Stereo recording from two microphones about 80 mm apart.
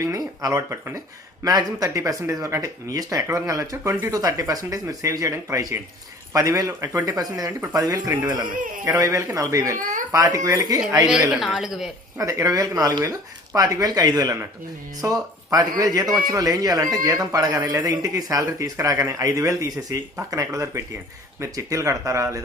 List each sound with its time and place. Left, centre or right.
0.0 s a man's voice: right
11.3 s speech: centre
12.1 s a man's voice: right